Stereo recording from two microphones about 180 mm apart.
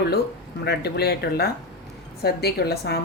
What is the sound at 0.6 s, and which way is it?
A woman's voice, 65° left (ahead or behind).